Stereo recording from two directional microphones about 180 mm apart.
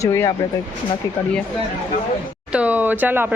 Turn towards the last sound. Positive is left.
turn(degrees=-10)  # may be behind; listen again after turning